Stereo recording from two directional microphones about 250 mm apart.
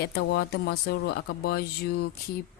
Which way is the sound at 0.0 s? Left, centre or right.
Left.